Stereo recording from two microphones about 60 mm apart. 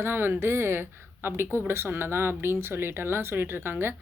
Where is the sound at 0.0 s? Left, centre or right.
Right.